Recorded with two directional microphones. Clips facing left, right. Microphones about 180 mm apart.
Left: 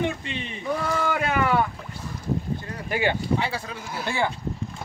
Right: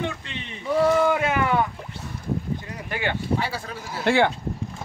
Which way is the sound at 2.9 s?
15° left (ahead or behind).